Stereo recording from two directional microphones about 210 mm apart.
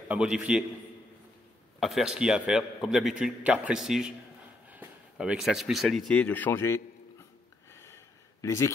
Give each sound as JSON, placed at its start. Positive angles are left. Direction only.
{"t": 0.1, "sound": "a man's voice", "side_deg": -5}
{"t": 1.8, "sound": "a man's voice", "side_deg": 0}
{"t": 7.7, "sound": "a sound", "side_deg": 15}